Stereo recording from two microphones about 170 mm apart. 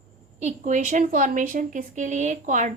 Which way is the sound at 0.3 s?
45° right (ahead or behind).